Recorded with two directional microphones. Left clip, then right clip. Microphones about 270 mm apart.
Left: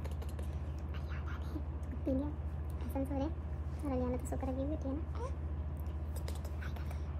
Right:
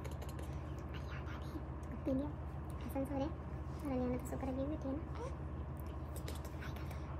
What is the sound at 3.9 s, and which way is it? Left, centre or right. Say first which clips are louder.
A woman's voice: left 2 dB; centre.